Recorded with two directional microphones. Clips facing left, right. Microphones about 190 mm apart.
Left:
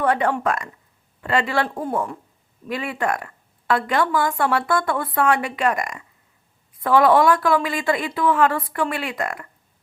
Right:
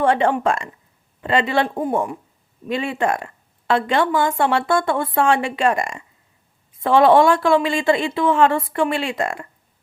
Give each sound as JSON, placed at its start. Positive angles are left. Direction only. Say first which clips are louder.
{"t": 0.0, "sound": "a woman's voice", "louder": "right 3 dB", "side_deg": -25}